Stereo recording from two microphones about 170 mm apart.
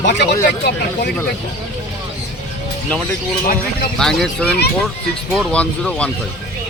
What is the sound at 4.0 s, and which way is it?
Speech, 5° left (ahead or behind).